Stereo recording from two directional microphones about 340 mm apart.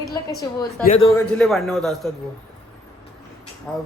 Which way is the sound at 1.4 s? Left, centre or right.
Centre.